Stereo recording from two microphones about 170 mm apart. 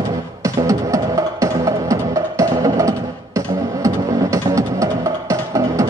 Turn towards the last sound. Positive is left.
turn(degrees=-20)  # may be behind; listen again after turning